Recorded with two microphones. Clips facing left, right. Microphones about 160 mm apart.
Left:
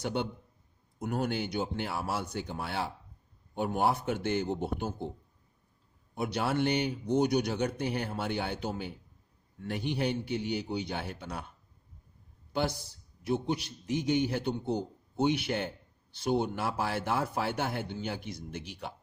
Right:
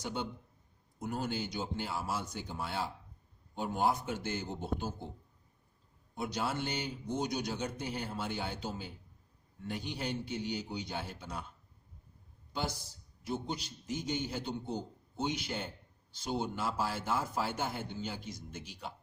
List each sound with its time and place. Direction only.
0.0 s speech: 65° left (ahead or behind)
6.1 s speech: 70° left (ahead or behind)
13.2 s speech: 65° left (ahead or behind)